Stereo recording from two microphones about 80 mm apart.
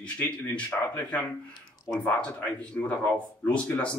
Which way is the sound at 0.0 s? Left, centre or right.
Centre.